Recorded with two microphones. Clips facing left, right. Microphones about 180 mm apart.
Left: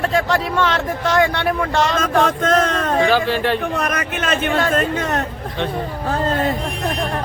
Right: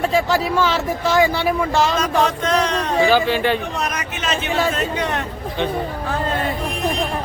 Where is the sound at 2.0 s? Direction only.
50° left (ahead or behind).